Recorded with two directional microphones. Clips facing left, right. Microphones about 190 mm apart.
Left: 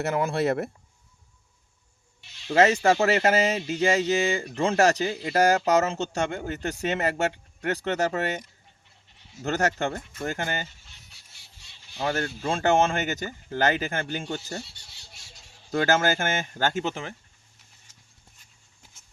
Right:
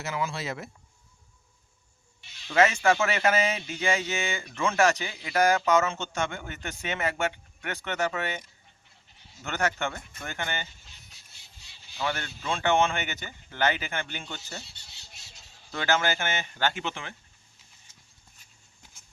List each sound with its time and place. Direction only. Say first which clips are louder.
0.0 s speech: left 8 dB; 60° left (ahead or behind)
2.5 s speech: left 3 dB; 35° left (ahead or behind)
11.9 s speech: left 4 dB; 40° left (ahead or behind)
15.7 s speech: left 5 dB; 45° left (ahead or behind)